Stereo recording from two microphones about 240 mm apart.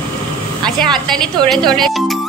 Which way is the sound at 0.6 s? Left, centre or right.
Centre.